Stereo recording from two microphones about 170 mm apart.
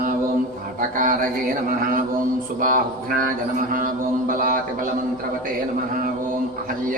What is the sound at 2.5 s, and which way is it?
A man's voice, 55° right (ahead or behind).